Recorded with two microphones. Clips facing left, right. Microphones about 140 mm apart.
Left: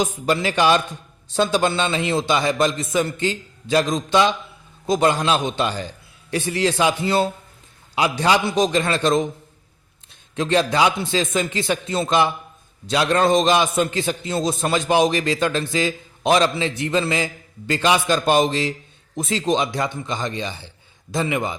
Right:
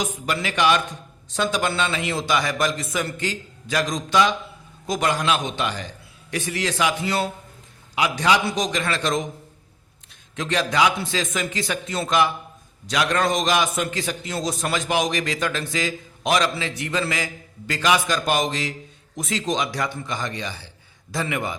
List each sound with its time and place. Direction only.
0.0 s a man's voice: 30° left (ahead or behind)
10.3 s a man's voice: 30° left (ahead or behind)